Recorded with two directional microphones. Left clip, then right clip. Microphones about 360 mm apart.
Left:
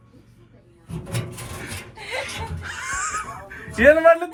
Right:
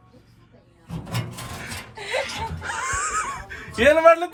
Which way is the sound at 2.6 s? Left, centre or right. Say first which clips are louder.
Right 1 dB; centre.